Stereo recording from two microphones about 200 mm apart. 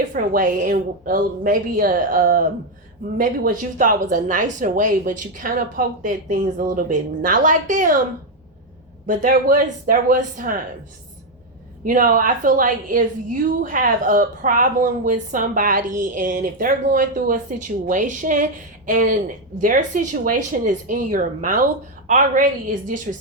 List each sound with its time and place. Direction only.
0.1 s a woman's voice: 40° right (ahead or behind)
9.0 s a woman's voice: 45° right (ahead or behind)
11.9 s a woman's voice: 45° right (ahead or behind)